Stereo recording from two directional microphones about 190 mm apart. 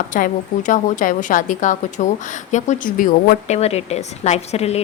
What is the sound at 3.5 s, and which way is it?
Speech, 35° left (ahead or behind).